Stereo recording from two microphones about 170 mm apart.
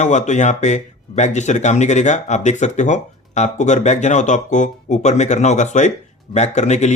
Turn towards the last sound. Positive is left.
turn(degrees=40)  # may be behind; listen again after turning